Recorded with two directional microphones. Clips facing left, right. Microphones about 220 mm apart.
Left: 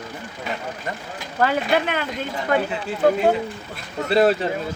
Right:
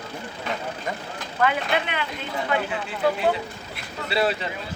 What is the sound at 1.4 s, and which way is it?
Speech, 40° left (ahead or behind).